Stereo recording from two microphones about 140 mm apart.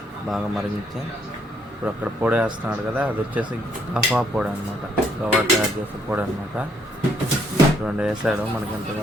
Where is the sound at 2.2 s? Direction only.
10° right (ahead or behind).